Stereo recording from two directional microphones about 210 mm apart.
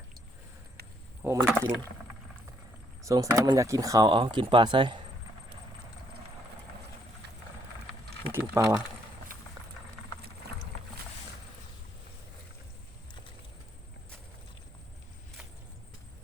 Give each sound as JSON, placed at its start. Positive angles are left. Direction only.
{"t": 1.2, "sound": "speech", "side_deg": -15}
{"t": 3.0, "sound": "speech", "side_deg": -15}
{"t": 8.3, "sound": "speech", "side_deg": -15}